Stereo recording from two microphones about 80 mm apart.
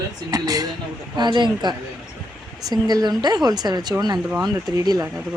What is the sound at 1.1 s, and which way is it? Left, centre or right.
Speech, right.